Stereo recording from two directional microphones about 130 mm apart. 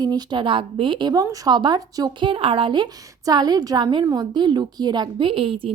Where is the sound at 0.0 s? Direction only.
30° right (ahead or behind).